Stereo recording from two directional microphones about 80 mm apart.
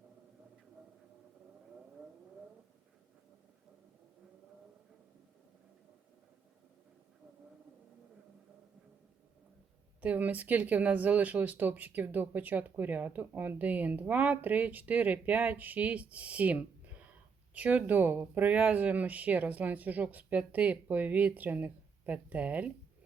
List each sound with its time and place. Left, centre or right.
10.0 s speech: centre